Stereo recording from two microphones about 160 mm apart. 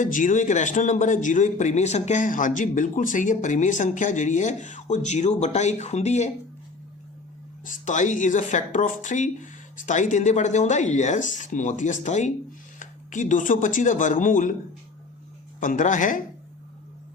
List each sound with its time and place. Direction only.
0.0 s speech: 55° left (ahead or behind)
7.6 s speech: 55° left (ahead or behind)
15.6 s speech: 55° left (ahead or behind)